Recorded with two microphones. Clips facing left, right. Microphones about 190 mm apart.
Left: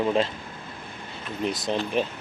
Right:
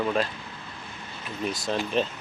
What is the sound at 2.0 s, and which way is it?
Speech, 10° left (ahead or behind).